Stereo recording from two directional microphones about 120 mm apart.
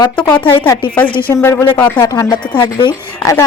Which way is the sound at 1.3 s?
20° left (ahead or behind).